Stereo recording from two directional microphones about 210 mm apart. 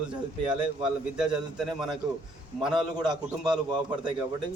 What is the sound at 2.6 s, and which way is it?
Speech, 20° right (ahead or behind).